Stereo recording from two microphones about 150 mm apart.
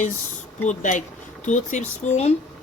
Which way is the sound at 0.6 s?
55° left (ahead or behind).